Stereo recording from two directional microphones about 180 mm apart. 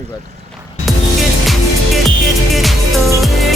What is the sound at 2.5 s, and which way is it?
Music, centre (ahead or behind).